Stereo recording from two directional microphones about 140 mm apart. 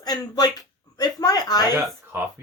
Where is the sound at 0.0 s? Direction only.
30° left (ahead or behind).